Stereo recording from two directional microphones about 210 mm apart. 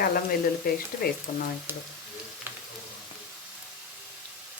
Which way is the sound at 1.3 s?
35° left (ahead or behind).